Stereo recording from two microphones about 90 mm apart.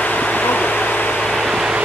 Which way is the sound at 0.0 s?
15° left (ahead or behind).